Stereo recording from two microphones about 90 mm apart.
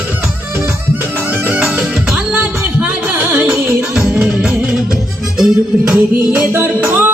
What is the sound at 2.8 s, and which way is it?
Music, 20° right (ahead or behind).